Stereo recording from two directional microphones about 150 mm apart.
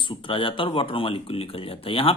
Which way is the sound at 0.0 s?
35° left (ahead or behind).